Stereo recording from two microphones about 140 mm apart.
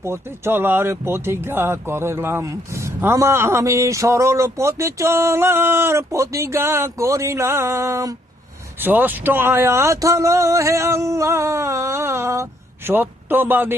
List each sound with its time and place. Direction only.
0.0 s speech: 15° right (ahead or behind)